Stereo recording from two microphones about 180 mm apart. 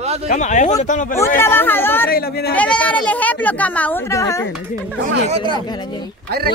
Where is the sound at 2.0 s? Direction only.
60° left (ahead or behind).